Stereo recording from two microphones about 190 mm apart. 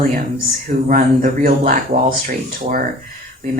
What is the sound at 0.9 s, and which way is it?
Speech, 45° right (ahead or behind).